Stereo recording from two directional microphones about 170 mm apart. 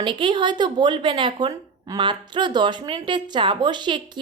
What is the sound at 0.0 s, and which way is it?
Speech, 30° right (ahead or behind).